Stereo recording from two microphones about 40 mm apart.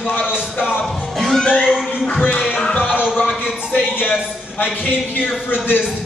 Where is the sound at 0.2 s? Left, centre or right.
Right.